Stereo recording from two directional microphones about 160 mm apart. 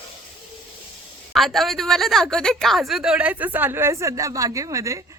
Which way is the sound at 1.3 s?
Centre (ahead or behind).